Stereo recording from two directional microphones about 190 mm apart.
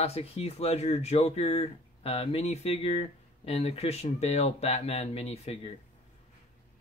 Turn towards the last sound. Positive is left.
turn(degrees=35)  # may be behind; listen again after turning